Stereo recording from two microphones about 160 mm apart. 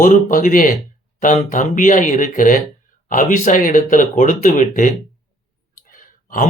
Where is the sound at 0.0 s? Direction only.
55° left (ahead or behind).